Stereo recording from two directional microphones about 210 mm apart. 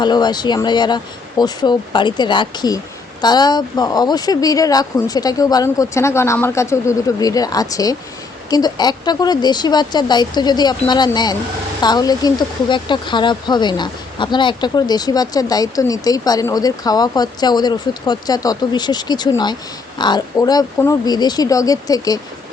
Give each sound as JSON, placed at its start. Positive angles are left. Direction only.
{"t": 0.0, "sound": "speech", "side_deg": 20}